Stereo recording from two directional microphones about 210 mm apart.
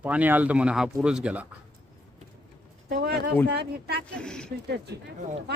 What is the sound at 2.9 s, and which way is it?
Speech, 45° right (ahead or behind).